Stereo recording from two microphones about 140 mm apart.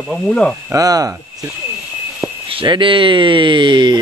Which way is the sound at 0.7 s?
25° right (ahead or behind).